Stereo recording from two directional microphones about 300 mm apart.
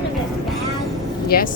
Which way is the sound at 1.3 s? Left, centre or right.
Left.